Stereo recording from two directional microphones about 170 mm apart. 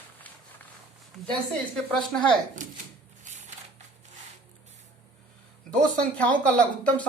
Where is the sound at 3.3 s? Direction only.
45° right (ahead or behind).